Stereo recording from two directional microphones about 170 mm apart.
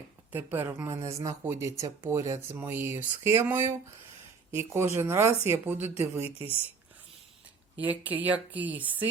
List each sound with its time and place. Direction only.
0.3 s a woman's voice: 10° right (ahead or behind)
7.8 s a woman's voice: 10° right (ahead or behind)